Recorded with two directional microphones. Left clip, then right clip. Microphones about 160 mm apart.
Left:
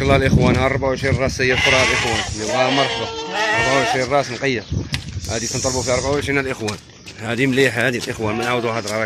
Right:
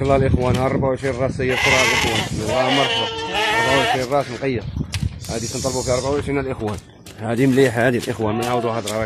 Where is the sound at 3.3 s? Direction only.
40° right (ahead or behind).